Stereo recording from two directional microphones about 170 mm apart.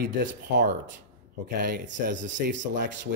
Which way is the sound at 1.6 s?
80° right.